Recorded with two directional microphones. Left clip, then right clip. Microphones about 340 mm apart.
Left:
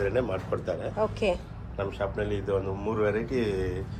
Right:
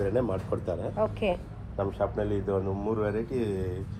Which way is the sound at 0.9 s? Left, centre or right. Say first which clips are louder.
Left 1 dB; centre.